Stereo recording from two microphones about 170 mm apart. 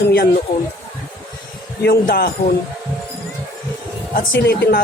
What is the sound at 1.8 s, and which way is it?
Speech, 70° left (ahead or behind).